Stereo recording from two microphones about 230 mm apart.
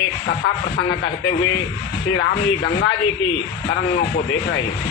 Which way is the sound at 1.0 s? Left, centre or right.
Left.